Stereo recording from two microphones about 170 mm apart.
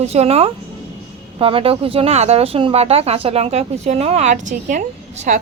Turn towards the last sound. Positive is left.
turn(degrees=-45)  # may be behind; listen again after turning